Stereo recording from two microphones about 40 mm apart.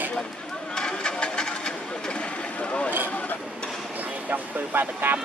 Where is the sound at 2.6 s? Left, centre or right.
Left.